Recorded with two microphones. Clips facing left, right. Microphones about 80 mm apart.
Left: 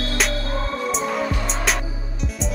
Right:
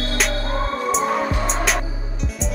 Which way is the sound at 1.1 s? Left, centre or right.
Right.